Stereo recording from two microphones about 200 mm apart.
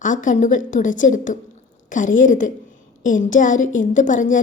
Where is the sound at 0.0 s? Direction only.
40° left (ahead or behind).